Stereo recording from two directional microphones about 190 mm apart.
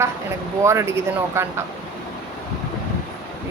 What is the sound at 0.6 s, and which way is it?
Speech, 15° right (ahead or behind).